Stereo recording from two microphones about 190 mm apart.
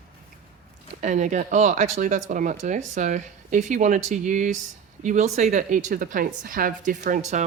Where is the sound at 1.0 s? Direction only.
40° right (ahead or behind).